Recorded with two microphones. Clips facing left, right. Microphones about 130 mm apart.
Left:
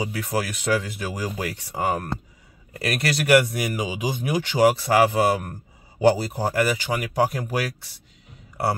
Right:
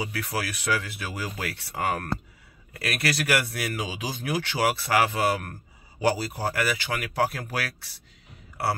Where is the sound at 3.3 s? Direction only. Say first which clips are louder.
Left 8 dB; 15° left (ahead or behind).